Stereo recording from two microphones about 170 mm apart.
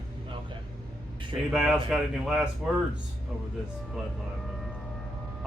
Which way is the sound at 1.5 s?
Centre (ahead or behind).